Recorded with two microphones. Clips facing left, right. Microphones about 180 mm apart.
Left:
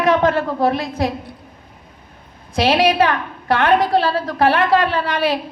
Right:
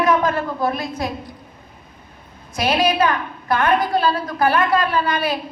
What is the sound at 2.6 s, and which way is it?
A woman's voice, 70° left (ahead or behind).